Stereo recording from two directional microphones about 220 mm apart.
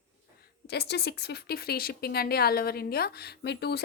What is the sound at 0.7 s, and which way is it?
Speech, 50° left (ahead or behind).